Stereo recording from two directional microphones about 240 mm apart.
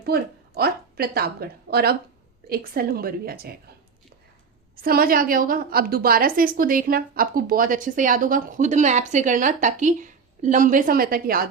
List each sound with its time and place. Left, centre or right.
0.0 s a woman's voice: right
4.8 s a woman's voice: right